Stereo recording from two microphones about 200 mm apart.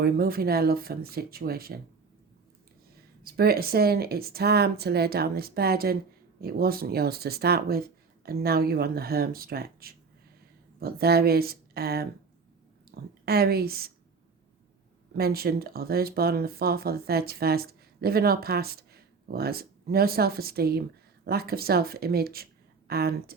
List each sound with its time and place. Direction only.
0.0 s speech: 50° right (ahead or behind)
3.2 s a woman's voice: 50° right (ahead or behind)
15.1 s speech: 50° right (ahead or behind)